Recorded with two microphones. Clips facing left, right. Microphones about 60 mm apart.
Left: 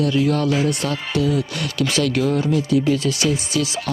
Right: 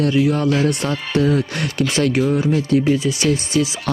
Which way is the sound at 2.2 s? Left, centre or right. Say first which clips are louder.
Right 2 dB; centre.